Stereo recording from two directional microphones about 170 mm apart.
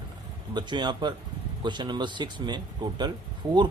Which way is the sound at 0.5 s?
25° right (ahead or behind).